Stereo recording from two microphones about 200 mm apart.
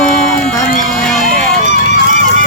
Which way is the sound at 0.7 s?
40° left (ahead or behind).